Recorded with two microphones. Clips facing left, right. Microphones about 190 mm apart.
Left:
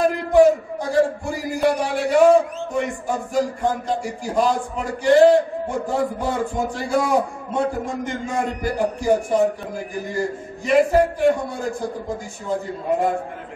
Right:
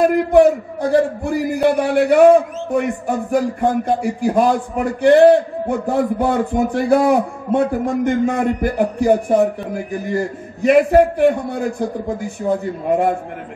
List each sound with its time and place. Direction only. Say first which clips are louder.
0.0 s a man's voice: right 3 dB; 60° right (ahead or behind)
10.6 s a man's voice: right 5 dB; 60° right (ahead or behind)